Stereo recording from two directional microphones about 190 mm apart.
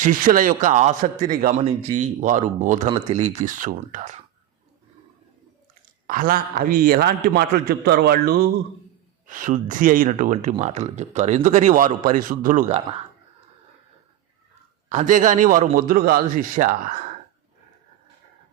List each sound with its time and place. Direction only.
0.0 s a man's voice: 45° right (ahead or behind)
6.1 s a man's voice: 45° right (ahead or behind)
9.2 s speech: 45° right (ahead or behind)
14.8 s a man's voice: 40° right (ahead or behind)